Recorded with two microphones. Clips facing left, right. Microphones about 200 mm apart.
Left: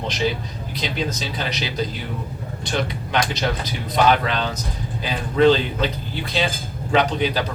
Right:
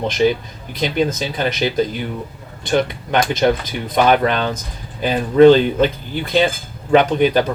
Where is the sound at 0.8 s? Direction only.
50° right (ahead or behind).